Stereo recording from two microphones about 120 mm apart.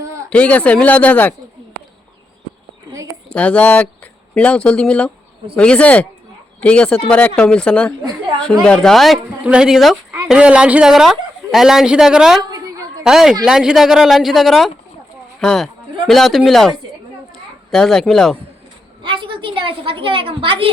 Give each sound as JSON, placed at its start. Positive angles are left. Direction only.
{"t": 0.3, "sound": "speech", "side_deg": 10}
{"t": 3.2, "sound": "speech", "side_deg": 10}
{"t": 12.4, "sound": "a sound", "side_deg": -35}
{"t": 13.1, "sound": "speech", "side_deg": -5}
{"t": 19.0, "sound": "a woman's voice", "side_deg": -45}